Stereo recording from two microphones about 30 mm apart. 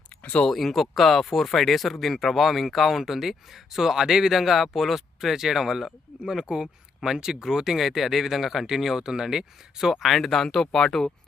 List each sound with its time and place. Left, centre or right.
0.2 s a sound: left
0.5 s speech: centre
6.4 s speech: right; by 8.6 s centre
9.0 s speech: right
9.9 s speech: centre